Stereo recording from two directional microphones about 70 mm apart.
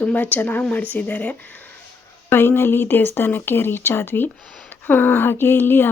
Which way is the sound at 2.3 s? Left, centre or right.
Left.